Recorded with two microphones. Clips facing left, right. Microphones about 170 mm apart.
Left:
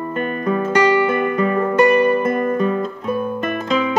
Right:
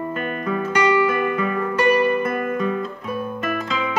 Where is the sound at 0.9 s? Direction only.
30° left (ahead or behind).